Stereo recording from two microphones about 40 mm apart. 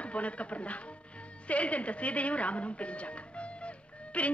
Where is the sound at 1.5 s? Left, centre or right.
Left.